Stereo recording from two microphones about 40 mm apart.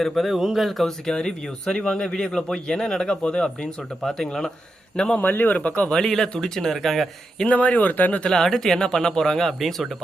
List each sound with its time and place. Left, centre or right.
0.0 s speech: centre
0.9 s speech: centre
4.3 s speech: centre
5.2 s a man's voice: left
5.5 s speech: left
5.9 s speech: centre
6.7 s speech: centre
7.4 s speech: left
8.2 s speech: centre